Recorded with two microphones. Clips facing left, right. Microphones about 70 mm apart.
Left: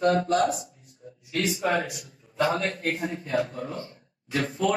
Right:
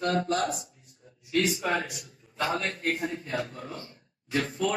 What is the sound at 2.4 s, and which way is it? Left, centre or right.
Speech, centre.